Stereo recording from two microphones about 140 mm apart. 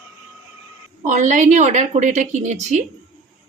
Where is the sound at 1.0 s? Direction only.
60° right (ahead or behind).